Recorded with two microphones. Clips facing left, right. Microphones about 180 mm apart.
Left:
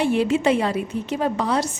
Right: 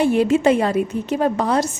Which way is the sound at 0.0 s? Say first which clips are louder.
Right 4 dB; 45° right (ahead or behind).